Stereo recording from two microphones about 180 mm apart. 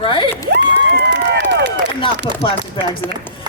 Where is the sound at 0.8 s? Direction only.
75° right (ahead or behind).